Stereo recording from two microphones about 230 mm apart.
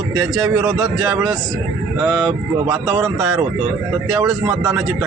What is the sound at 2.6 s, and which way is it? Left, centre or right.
Speech, centre.